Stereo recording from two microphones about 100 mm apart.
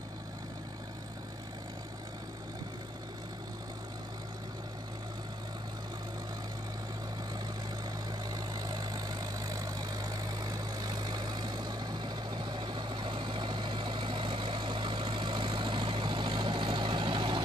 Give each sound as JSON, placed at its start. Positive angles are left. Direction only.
{"t": 8.3, "sound": "vehicle", "side_deg": -40}